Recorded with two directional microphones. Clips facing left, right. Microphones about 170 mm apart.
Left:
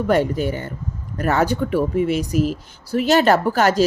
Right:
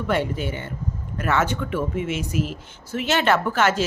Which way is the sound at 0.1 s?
40° left (ahead or behind).